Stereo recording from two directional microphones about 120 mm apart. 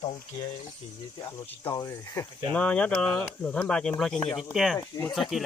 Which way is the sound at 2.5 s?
10° left (ahead or behind).